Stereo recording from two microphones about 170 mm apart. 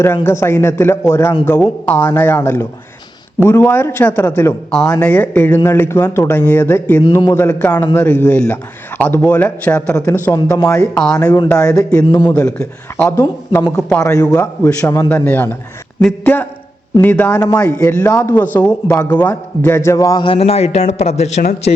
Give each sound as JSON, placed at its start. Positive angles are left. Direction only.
{"t": 0.0, "sound": "a man's voice", "side_deg": 15}
{"t": 10.3, "sound": "speech", "side_deg": 20}
{"t": 10.7, "sound": "a man's voice", "side_deg": 5}
{"t": 13.1, "sound": "a man's voice", "side_deg": 15}